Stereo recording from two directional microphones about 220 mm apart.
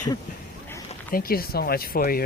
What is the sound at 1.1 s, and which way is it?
Speech, 40° left (ahead or behind).